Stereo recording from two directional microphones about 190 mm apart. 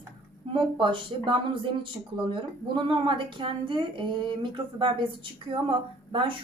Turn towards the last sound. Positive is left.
turn(degrees=-25)  # may be behind; listen again after turning